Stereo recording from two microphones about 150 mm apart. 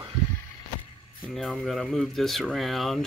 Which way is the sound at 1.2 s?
Centre (ahead or behind).